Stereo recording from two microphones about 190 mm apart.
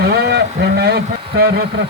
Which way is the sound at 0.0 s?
60° right (ahead or behind).